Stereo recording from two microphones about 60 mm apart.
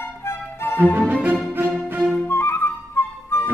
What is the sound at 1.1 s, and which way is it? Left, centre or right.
Music, right.